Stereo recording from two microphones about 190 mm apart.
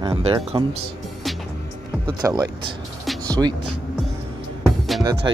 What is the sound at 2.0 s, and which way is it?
Speech, 20° right (ahead or behind).